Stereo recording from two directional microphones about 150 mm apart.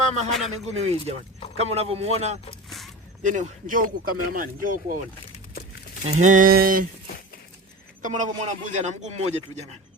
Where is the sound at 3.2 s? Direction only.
55° right (ahead or behind).